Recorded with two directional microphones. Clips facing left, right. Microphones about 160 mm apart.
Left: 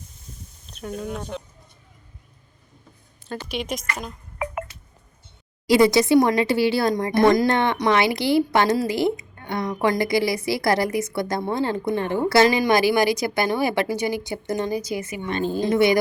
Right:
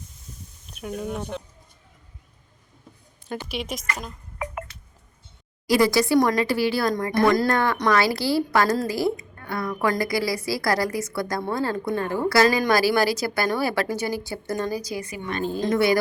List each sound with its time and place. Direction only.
0.7 s speech: 10° right (ahead or behind)
3.4 s music: centre (ahead or behind)
5.6 s a woman's voice: 25° left (ahead or behind)